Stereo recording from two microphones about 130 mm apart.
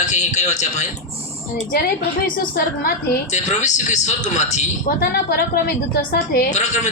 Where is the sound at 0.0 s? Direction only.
65° left (ahead or behind).